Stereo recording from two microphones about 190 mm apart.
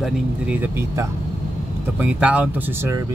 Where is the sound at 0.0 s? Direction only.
10° right (ahead or behind).